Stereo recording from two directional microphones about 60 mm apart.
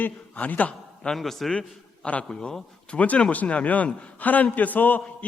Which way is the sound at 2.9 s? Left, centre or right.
Left.